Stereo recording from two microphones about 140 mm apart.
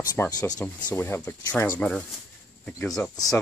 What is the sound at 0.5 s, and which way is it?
Speech, 15° left (ahead or behind).